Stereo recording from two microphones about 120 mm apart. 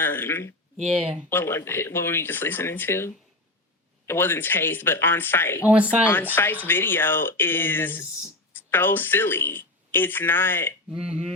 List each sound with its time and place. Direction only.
0.0 s speech: 20° left (ahead or behind)
0.8 s speech: 5° right (ahead or behind)
1.3 s speech: 20° left (ahead or behind)
5.6 s speech: 10° right (ahead or behind)
6.3 s speech: 15° left (ahead or behind)
10.8 s speech: 5° right (ahead or behind)